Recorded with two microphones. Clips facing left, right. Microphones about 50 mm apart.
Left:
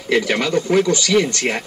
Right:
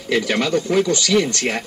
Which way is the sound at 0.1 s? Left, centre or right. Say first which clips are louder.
Left 1 dB; centre.